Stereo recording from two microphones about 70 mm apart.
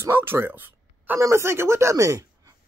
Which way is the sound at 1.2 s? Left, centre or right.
Right.